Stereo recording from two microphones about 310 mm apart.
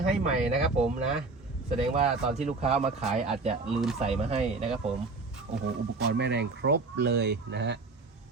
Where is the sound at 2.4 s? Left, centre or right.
Centre.